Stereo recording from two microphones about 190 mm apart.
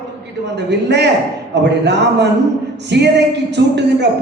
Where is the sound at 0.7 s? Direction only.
65° right (ahead or behind).